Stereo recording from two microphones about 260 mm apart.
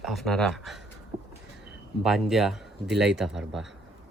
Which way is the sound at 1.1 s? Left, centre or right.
Right.